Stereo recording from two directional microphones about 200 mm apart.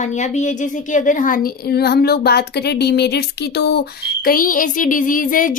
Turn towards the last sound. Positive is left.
turn(degrees=40)  # may be behind; listen again after turning